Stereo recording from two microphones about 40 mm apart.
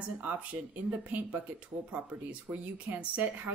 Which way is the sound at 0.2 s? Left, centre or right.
Right.